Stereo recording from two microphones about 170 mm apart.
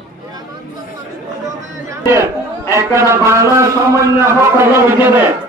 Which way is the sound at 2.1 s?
15° right (ahead or behind).